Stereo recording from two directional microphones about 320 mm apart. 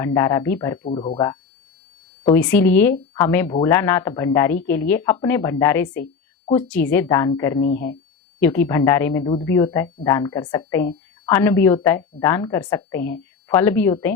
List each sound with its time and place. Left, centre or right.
0.0 s a woman's voice: centre